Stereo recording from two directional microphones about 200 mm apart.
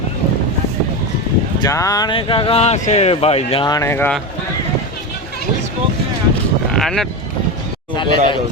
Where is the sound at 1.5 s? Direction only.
15° left (ahead or behind).